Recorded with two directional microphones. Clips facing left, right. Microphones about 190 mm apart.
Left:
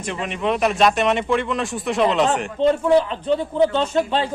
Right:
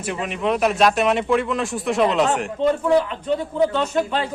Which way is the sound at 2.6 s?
30° left (ahead or behind).